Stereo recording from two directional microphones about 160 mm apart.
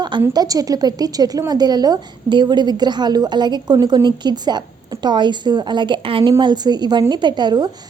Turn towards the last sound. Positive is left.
turn(degrees=-25)  # may be behind; listen again after turning